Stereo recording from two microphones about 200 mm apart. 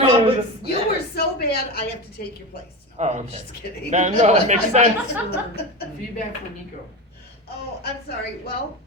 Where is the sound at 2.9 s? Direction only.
35° right (ahead or behind).